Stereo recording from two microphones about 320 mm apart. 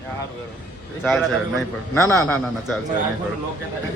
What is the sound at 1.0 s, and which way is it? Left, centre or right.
A man's voice, centre.